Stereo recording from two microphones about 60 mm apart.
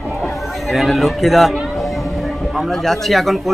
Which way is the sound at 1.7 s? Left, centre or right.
Centre.